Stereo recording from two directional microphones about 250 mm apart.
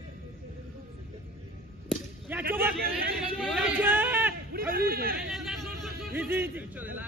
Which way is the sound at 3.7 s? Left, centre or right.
Centre.